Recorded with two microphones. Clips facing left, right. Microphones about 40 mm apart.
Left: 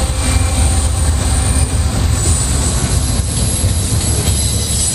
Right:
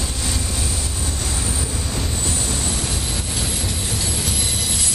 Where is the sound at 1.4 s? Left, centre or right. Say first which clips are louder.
Left 6 dB; left.